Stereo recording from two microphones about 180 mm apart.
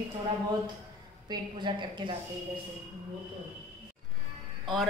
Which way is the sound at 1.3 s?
25° right (ahead or behind).